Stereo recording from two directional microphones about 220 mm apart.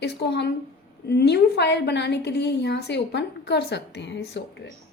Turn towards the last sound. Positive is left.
turn(degrees=50)  # may be behind; listen again after turning